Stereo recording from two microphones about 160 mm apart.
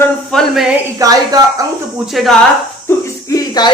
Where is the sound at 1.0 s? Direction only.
20° right (ahead or behind).